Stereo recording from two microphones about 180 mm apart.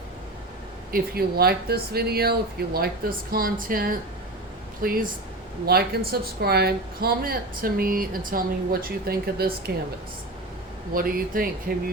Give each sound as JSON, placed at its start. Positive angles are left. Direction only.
{"t": 0.9, "sound": "speech", "side_deg": -55}
{"t": 10.9, "sound": "speech", "side_deg": -55}